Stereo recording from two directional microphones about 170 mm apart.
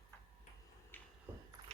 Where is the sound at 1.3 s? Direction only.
15° right (ahead or behind).